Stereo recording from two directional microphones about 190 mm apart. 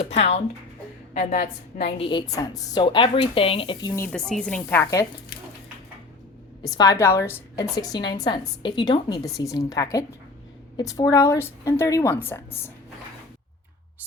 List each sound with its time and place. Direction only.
0.1 s a woman's voice: 35° left (ahead or behind)
2.0 s a woman's voice: 25° left (ahead or behind)
4.1 s a woman's voice: 5° left (ahead or behind)
6.7 s a woman's voice: 20° left (ahead or behind)